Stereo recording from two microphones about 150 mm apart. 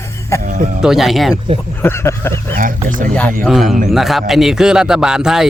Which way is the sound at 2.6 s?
65° right (ahead or behind).